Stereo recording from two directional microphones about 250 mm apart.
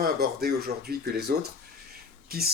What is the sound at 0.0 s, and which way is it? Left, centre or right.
Speech, right.